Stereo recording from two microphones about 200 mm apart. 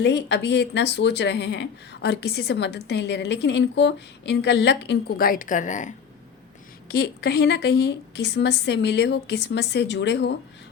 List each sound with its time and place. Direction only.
0.0 s speech: 60° left (ahead or behind); by 5.9 s 40° left (ahead or behind)
6.8 s speech: 55° left (ahead or behind)